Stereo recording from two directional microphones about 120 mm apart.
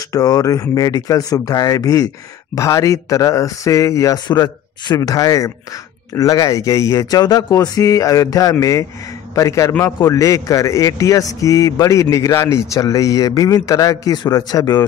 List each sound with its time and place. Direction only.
0.1 s a man's voice: 30° left (ahead or behind)